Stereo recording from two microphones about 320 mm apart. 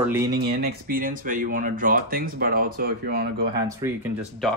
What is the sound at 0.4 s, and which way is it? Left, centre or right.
Speech, right.